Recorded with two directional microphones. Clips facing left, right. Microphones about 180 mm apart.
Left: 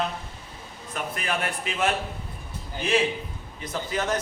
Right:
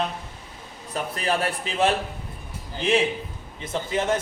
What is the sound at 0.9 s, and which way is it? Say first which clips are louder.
A man's voice: right 4 dB; 35° right (ahead or behind).